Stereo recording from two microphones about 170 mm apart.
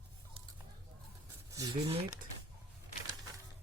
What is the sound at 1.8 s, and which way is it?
Speech, 35° right (ahead or behind).